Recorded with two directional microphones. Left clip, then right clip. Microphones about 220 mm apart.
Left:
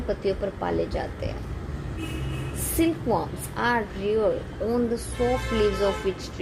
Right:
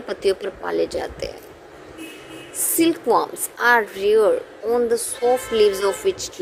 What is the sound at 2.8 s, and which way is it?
Speech, 35° right (ahead or behind).